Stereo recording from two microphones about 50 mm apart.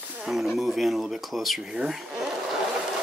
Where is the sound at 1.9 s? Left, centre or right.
Centre.